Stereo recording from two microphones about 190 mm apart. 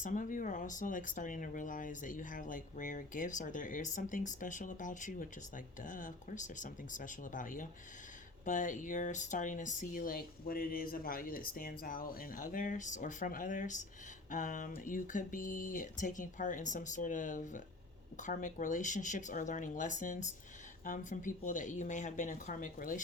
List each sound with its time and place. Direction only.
0.0 s speech: 45° left (ahead or behind)